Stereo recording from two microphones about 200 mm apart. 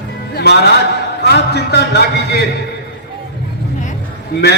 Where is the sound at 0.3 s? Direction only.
55° left (ahead or behind).